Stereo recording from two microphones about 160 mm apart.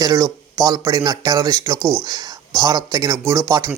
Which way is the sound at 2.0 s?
25° right (ahead or behind).